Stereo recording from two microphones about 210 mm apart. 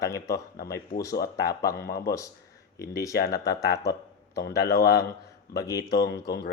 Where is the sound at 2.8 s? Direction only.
15° left (ahead or behind).